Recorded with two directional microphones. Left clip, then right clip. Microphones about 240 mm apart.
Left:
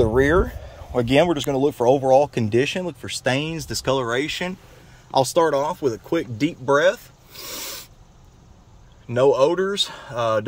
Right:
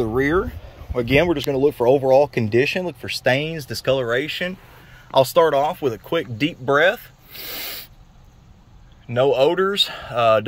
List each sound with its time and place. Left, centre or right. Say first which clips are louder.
0.0 s speech: left 2 dB; centre
5.1 s speech: right 3 dB; centre
9.1 s speech: even; centre